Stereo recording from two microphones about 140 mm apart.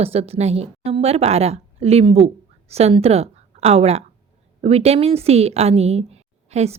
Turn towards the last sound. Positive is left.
turn(degrees=-50)  # may be behind; listen again after turning